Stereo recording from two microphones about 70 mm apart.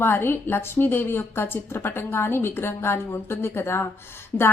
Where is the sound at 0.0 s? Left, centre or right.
Left.